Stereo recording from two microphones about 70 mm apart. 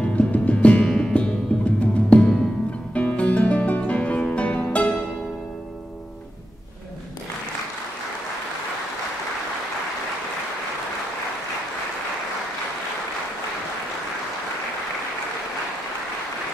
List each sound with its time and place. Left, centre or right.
0.0 s music: centre